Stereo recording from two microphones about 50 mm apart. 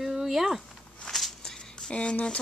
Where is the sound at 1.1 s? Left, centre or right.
Centre; by 2.4 s left.